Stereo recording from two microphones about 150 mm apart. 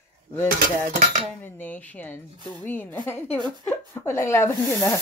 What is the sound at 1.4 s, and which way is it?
Speech, 10° left (ahead or behind).